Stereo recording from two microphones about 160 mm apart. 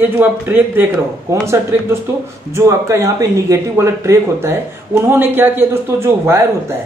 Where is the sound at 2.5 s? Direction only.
20° right (ahead or behind).